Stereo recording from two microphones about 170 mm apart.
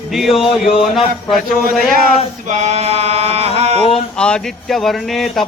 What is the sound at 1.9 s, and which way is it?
Male singing, 50° right (ahead or behind).